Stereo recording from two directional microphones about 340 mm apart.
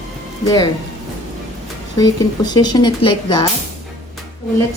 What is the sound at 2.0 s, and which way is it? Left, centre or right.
Speech, centre.